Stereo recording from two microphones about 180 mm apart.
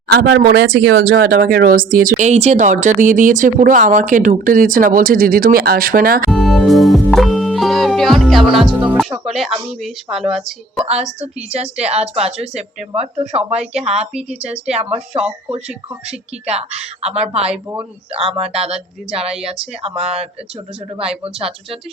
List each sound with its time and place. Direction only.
0.1 s speech: 65° right (ahead or behind)
6.3 s music: centre (ahead or behind)
10.8 s a woman's voice: 35° right (ahead or behind)
14.1 s music: 5° right (ahead or behind)
14.4 s a woman's voice: 35° right (ahead or behind)
21.2 s a woman's voice: 30° right (ahead or behind)